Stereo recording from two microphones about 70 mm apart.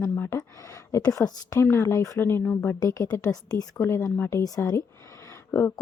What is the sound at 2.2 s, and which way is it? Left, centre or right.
Speech, left.